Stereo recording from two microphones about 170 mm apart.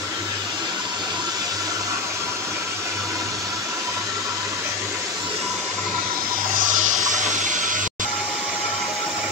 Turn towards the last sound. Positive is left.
turn(degrees=-45)  # may be behind; listen again after turning